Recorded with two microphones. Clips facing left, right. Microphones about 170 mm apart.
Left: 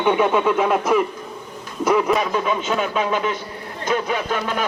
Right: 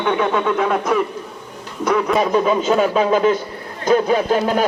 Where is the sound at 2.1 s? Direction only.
35° right (ahead or behind).